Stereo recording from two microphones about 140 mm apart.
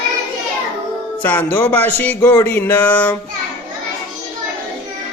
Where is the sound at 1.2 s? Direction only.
15° left (ahead or behind).